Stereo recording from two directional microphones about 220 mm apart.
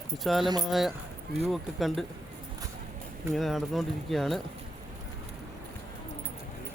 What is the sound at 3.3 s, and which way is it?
Speech, centre (ahead or behind).